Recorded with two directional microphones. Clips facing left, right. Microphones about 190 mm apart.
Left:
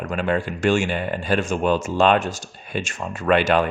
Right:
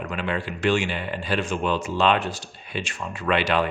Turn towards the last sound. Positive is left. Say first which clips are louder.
# left 4 dB
turn(degrees=45)  # may be behind; listen again after turning